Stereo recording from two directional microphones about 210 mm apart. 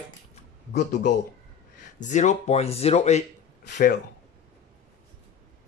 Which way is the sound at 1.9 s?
35° left (ahead or behind).